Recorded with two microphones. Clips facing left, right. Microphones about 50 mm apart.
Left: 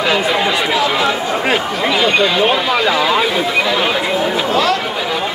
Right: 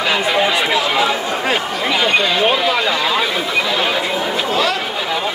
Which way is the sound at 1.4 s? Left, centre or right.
Centre.